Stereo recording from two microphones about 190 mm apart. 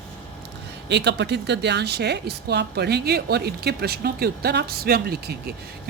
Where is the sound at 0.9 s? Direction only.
65° right (ahead or behind).